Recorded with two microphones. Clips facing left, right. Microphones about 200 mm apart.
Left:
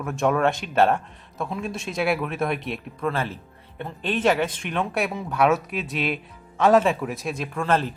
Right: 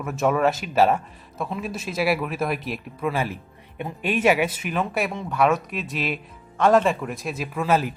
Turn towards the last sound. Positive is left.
turn(degrees=-5)  # may be behind; listen again after turning